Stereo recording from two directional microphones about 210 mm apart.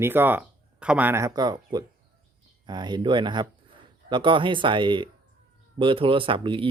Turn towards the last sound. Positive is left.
turn(degrees=-25)  # may be behind; listen again after turning